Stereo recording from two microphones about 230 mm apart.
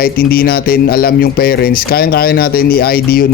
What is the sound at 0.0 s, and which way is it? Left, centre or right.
Speech, left.